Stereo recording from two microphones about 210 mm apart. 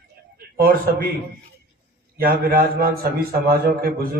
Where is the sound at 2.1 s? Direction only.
45° right (ahead or behind).